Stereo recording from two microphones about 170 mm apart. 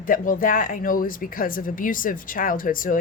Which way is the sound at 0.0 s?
55° left (ahead or behind).